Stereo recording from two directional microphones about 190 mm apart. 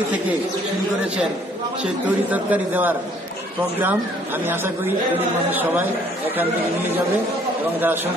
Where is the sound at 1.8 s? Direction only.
10° right (ahead or behind).